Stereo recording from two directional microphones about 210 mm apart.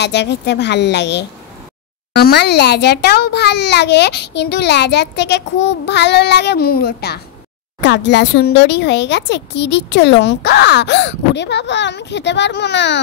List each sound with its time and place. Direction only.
0.0 s a child's voice: 55° left (ahead or behind)